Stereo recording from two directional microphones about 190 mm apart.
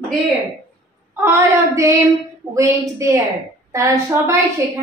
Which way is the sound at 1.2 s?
15° right (ahead or behind).